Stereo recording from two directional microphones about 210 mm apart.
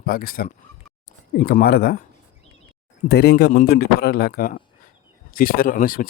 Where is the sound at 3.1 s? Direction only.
50° left (ahead or behind).